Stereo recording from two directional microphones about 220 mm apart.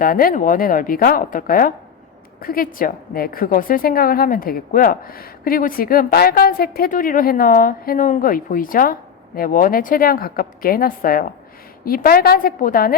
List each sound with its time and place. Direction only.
0.0 s a woman's voice: 40° left (ahead or behind)